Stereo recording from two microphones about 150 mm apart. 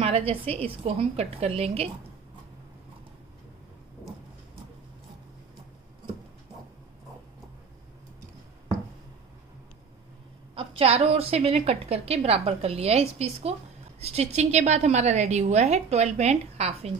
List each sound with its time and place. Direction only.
0.0 s a woman's voice: 40° right (ahead or behind)
10.5 s a woman's voice: 35° right (ahead or behind)